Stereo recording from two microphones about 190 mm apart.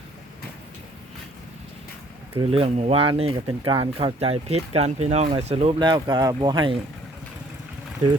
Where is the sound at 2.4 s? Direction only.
30° right (ahead or behind).